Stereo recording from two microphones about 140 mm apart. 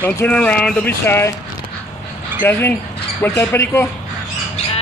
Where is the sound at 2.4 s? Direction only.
15° left (ahead or behind).